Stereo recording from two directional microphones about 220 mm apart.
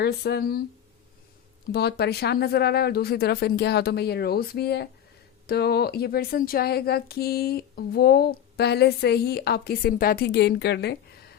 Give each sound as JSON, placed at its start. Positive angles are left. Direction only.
{"t": 0.0, "sound": "speech", "side_deg": 45}
{"t": 1.7, "sound": "speech", "side_deg": 45}